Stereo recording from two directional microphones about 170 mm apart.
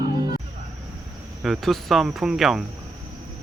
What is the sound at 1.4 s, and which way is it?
Speech, centre (ahead or behind).